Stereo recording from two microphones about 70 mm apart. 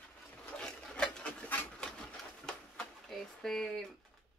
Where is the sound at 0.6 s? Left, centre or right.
Centre.